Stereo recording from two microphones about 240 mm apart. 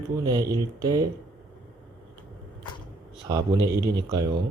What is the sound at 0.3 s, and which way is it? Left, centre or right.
Speech, centre.